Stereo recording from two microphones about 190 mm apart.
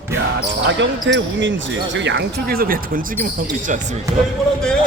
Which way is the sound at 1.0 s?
70° right (ahead or behind).